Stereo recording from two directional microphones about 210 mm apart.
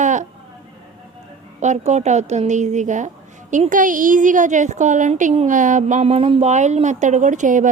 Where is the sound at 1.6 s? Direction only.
35° right (ahead or behind).